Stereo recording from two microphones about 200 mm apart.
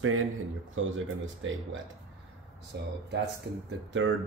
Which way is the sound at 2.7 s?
60° right (ahead or behind).